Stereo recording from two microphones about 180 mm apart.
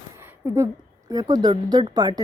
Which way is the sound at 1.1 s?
20° right (ahead or behind).